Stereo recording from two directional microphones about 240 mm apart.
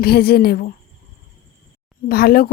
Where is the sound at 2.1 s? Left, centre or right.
Left.